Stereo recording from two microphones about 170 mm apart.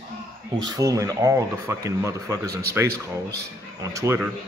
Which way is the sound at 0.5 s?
20° right (ahead or behind).